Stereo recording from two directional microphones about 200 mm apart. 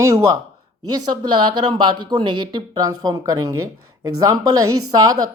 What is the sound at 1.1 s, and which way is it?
A woman's voice, 20° right (ahead or behind).